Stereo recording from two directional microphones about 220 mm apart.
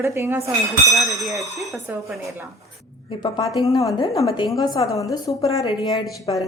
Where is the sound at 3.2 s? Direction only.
20° left (ahead or behind).